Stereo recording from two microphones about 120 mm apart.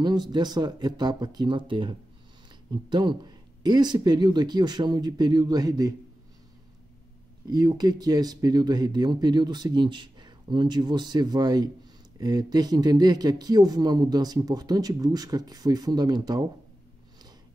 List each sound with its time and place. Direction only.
0.0 s speech: 40° right (ahead or behind)
7.4 s speech: 35° right (ahead or behind)